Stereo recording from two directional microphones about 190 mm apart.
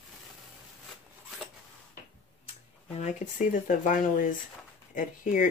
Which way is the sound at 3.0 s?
40° left (ahead or behind).